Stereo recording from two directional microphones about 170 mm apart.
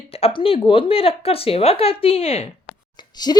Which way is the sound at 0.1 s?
35° left (ahead or behind).